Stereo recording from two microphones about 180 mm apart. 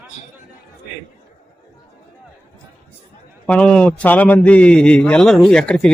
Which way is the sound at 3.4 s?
5° left (ahead or behind).